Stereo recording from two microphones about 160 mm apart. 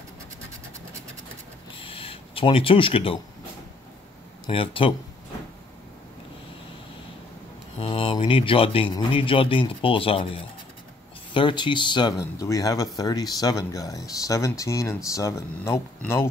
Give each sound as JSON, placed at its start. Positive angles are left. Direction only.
{"t": 1.8, "sound": "a sound", "side_deg": 35}
{"t": 4.5, "sound": "speech", "side_deg": 35}
{"t": 7.8, "sound": "speech", "side_deg": 35}